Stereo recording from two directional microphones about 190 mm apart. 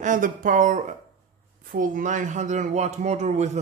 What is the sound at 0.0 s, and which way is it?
A man's voice, 45° right (ahead or behind).